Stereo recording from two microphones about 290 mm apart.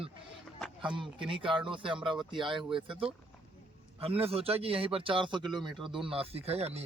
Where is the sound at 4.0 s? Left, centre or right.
Centre.